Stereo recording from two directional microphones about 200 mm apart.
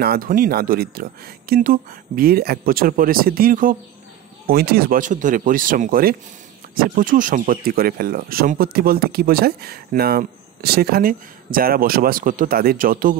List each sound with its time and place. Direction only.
0.0 s speech: 50° right (ahead or behind)